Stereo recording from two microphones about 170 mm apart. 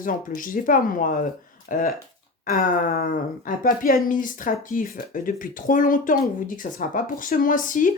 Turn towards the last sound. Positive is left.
turn(degrees=50)  # may be behind; listen again after turning